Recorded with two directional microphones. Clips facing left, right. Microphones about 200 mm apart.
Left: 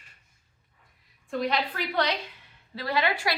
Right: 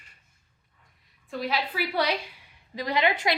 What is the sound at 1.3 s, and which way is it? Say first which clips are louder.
A woman's voice: left 2 dB; 5° right (ahead or behind).